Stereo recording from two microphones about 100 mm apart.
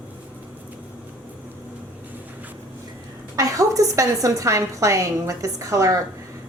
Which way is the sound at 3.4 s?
35° right (ahead or behind).